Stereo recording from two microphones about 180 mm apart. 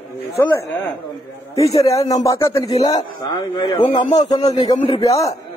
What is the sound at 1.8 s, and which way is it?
Speech, 20° left (ahead or behind).